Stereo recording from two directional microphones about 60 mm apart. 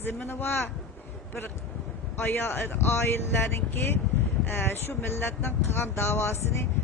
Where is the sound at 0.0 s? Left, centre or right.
Left.